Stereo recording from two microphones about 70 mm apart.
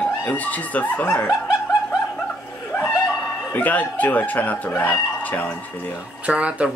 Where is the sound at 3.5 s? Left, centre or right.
Left.